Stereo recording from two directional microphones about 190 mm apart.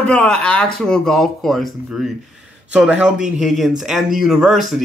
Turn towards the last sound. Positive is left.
turn(degrees=0)  # may be behind; listen again after turning